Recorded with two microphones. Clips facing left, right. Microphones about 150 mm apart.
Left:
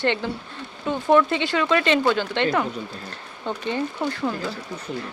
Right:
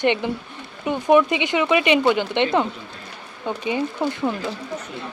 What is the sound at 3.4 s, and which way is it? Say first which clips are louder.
Speech: right 2 dB; 10° right (ahead or behind).